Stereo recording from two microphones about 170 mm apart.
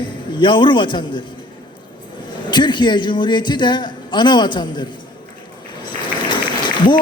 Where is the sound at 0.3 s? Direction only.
30° left (ahead or behind).